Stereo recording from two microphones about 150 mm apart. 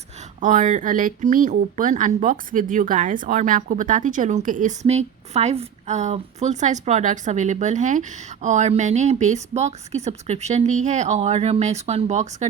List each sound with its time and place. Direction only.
0.3 s speech: 60° right (ahead or behind)
4.9 s a woman's voice: 45° right (ahead or behind)